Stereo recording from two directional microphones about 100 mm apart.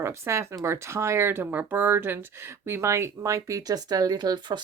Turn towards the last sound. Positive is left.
turn(degrees=-45)  # may be behind; listen again after turning